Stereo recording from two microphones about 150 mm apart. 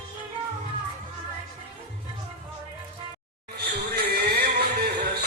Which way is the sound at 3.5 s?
90° right.